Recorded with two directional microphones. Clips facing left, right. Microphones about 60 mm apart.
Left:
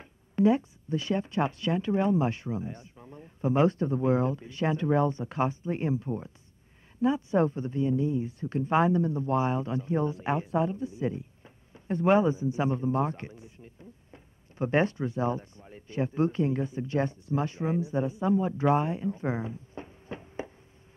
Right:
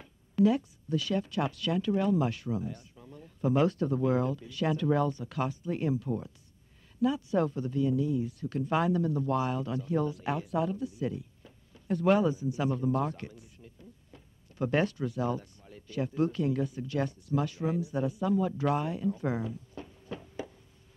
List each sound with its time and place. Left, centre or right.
0.0 s speech: left